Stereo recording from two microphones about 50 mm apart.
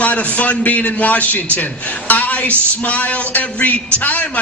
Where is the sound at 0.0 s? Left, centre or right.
Left.